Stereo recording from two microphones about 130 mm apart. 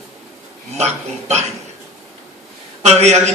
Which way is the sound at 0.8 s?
55° right (ahead or behind).